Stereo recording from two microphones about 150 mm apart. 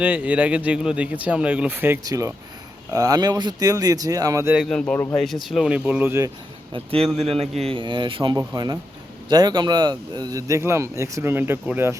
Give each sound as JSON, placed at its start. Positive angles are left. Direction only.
{"t": 0.0, "sound": "speech", "side_deg": -10}
{"t": 4.5, "sound": "speech", "side_deg": 0}
{"t": 6.7, "sound": "a man's voice", "side_deg": -40}